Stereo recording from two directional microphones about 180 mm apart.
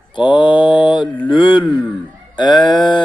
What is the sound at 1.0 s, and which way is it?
Mantra, 10° left (ahead or behind).